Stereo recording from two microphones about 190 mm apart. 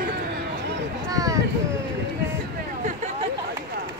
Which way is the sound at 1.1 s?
20° right (ahead or behind).